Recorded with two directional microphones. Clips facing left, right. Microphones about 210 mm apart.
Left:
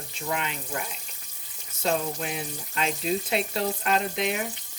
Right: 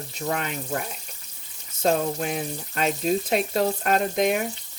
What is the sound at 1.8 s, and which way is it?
Speech, 45° right (ahead or behind).